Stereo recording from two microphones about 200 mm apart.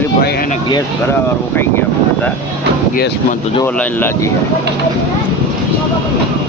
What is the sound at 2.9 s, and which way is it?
Speech, 45° left (ahead or behind).